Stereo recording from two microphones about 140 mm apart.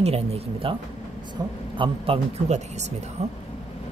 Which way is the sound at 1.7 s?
40° right (ahead or behind).